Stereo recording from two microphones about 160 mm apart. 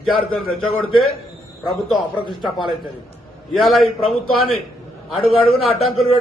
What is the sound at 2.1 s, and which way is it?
Speech, 30° left (ahead or behind).